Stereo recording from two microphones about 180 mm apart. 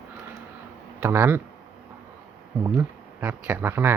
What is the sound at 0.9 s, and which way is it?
Speech, 15° right (ahead or behind).